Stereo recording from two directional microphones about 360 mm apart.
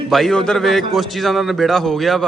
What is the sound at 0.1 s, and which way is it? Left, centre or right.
A man's voice, centre.